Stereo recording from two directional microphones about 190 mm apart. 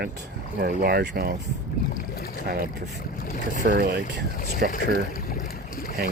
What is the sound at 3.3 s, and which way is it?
Speech, 45° left (ahead or behind).